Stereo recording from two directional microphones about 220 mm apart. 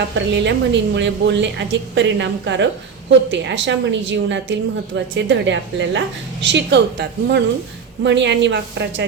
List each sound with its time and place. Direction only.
0.3 s a woman's voice: 55° right (ahead or behind)